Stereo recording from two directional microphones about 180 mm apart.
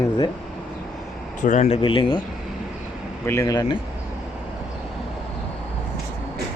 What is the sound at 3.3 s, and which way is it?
Speech, 20° left (ahead or behind).